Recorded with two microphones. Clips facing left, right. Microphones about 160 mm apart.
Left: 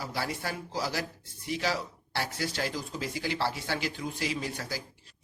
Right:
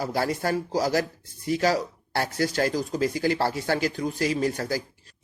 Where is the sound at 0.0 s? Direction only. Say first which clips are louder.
Right 8 dB; 45° right (ahead or behind).